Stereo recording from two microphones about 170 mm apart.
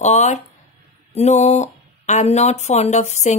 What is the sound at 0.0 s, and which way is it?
Speech, 40° left (ahead or behind).